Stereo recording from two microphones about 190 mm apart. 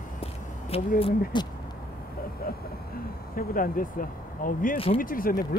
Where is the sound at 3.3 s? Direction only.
50° left (ahead or behind).